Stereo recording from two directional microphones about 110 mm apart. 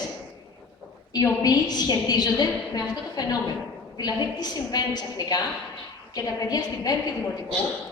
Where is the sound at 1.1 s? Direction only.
35° left (ahead or behind).